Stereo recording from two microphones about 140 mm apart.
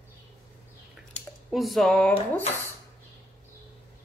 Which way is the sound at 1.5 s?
Centre (ahead or behind).